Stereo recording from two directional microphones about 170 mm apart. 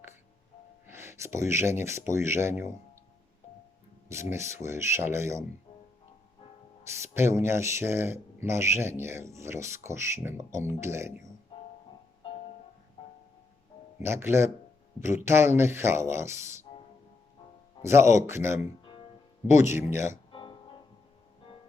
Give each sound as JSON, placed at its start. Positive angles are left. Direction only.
{"t": 0.9, "sound": "speech", "side_deg": -15}
{"t": 4.1, "sound": "speech", "side_deg": -15}
{"t": 7.0, "sound": "speech", "side_deg": -15}
{"t": 14.0, "sound": "speech", "side_deg": -15}
{"t": 17.8, "sound": "speech", "side_deg": -15}
{"t": 20.3, "sound": "music", "side_deg": 30}